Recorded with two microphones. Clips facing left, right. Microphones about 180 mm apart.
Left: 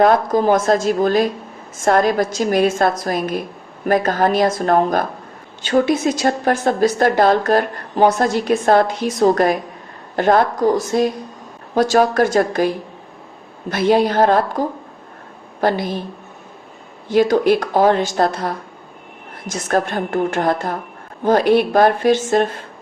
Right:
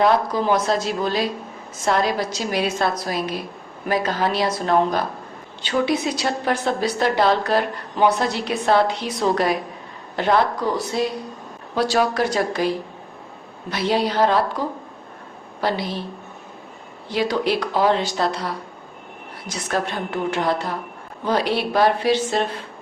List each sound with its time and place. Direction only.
0.0 s a woman's voice: 50° left (ahead or behind)
15.6 s a woman's voice: 50° left (ahead or behind)
17.1 s a woman's voice: 45° left (ahead or behind)